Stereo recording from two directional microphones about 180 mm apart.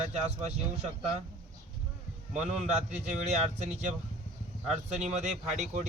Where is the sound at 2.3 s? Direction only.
40° right (ahead or behind).